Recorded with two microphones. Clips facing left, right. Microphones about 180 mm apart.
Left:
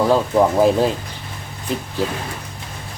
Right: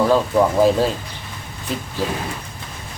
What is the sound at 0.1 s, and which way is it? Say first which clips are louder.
Speech: left 1 dB; 20° left (ahead or behind).